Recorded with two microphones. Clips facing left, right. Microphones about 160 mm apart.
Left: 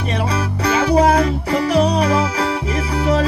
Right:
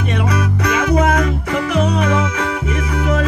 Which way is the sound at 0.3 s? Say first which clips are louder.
Even; 30° left (ahead or behind).